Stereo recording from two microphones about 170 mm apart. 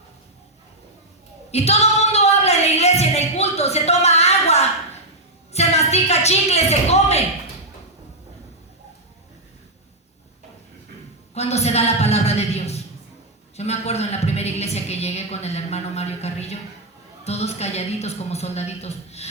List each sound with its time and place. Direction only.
1.5 s female singing: 40° left (ahead or behind)
5.5 s a woman's voice: 40° left (ahead or behind)
11.3 s a woman's voice: 40° left (ahead or behind)